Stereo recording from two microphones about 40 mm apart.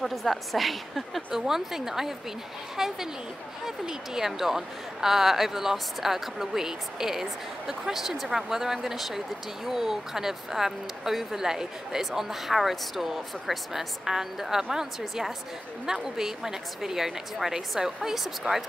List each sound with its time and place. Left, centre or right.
0.0 s a woman's voice: centre